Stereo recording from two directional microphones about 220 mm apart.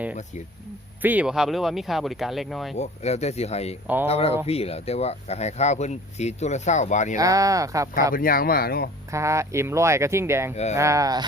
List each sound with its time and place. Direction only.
1.0 s speech: 5° right (ahead or behind)
2.7 s speech: 30° left (ahead or behind)
3.8 s speech: 10° right (ahead or behind)
4.1 s speech: 25° left (ahead or behind)
7.2 s speech: 15° right (ahead or behind)
8.1 s speech: 40° left (ahead or behind)
9.1 s speech: 15° right (ahead or behind)
10.5 s speech: 30° left (ahead or behind)
10.8 s speech: 15° right (ahead or behind)